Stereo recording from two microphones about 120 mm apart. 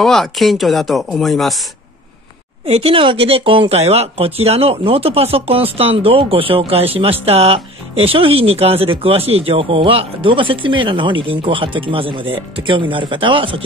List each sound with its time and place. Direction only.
0.0 s speech: 5° left (ahead or behind)
2.6 s speech: 55° right (ahead or behind)